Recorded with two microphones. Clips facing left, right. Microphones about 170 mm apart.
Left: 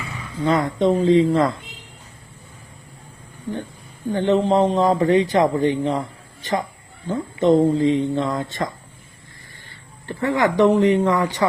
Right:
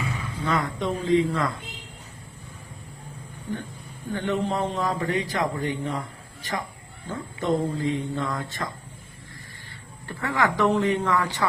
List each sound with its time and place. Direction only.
0.4 s a man's voice: 25° left (ahead or behind)
4.1 s a man's voice: 25° left (ahead or behind)
10.1 s a man's voice: 20° left (ahead or behind)